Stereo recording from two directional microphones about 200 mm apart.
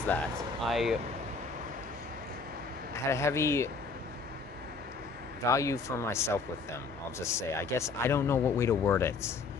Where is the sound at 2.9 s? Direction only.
15° left (ahead or behind).